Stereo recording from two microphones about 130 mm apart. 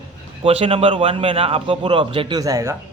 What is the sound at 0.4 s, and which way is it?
A man's voice, 50° right (ahead or behind).